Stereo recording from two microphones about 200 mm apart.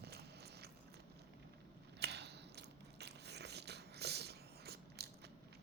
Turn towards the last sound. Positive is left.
turn(degrees=-55)  # may be behind; listen again after turning